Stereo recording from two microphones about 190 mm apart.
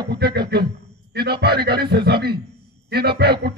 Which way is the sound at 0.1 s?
55° right (ahead or behind).